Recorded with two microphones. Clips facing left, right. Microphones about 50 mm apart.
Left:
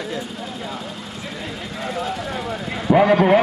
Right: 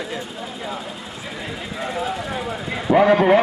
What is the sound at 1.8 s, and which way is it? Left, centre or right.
A man's voice, centre.